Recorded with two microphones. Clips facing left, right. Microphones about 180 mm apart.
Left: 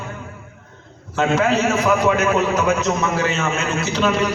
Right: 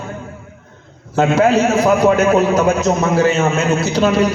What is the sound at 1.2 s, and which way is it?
A man's voice, 35° right (ahead or behind).